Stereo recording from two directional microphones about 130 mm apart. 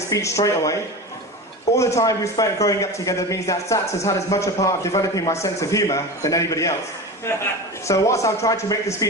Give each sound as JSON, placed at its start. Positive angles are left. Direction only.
{"t": 0.1, "sound": "a man's voice", "side_deg": 25}
{"t": 7.9, "sound": "a man's voice", "side_deg": 25}